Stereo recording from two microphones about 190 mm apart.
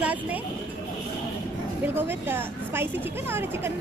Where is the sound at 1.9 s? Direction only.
10° right (ahead or behind).